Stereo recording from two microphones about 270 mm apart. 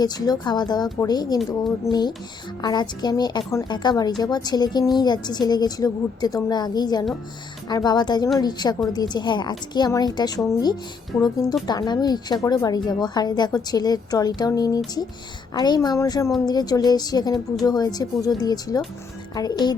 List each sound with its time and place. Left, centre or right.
0.0 s a woman's voice: centre